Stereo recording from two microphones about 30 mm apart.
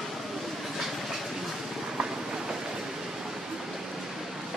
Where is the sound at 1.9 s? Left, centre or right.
Right.